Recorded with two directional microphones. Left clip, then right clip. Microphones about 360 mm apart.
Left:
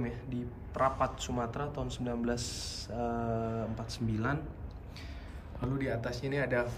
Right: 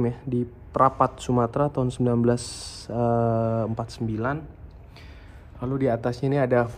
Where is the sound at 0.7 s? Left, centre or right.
Left.